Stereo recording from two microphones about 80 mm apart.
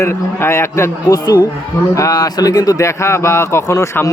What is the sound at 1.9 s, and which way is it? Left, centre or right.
Speech, left.